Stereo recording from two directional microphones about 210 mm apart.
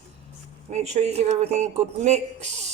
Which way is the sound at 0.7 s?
35° right (ahead or behind).